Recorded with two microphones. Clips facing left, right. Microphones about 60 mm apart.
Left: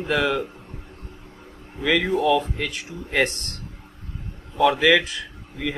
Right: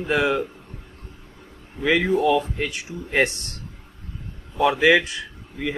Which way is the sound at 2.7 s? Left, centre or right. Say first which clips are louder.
Right 1 dB; centre.